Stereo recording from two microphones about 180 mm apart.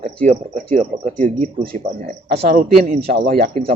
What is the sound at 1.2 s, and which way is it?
Speech, 40° right (ahead or behind).